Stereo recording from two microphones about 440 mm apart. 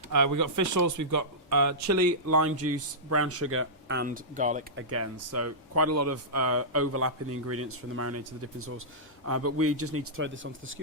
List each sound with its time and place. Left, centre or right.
0.1 s speech: right; by 4.8 s centre
4.8 s speech: right